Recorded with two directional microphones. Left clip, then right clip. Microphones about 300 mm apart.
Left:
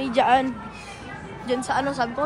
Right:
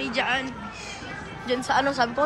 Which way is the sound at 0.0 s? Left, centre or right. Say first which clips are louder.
Left 6 dB; centre.